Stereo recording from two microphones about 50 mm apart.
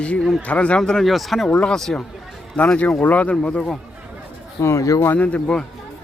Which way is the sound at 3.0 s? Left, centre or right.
Left.